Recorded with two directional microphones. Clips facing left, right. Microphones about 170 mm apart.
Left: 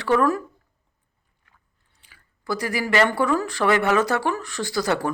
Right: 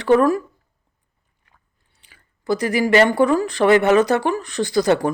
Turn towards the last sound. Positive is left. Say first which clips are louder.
# right 6 dB
turn(degrees=-20)  # may be behind; listen again after turning